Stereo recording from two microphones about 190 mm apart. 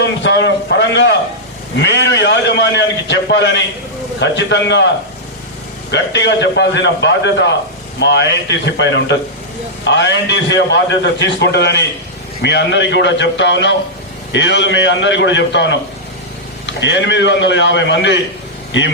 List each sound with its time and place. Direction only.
0.0 s a man's voice: 65° left (ahead or behind)
5.9 s a man's voice: 65° left (ahead or behind)
16.8 s a man's voice: 70° left (ahead or behind)